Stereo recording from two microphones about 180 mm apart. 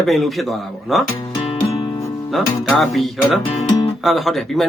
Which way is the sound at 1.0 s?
30° left (ahead or behind).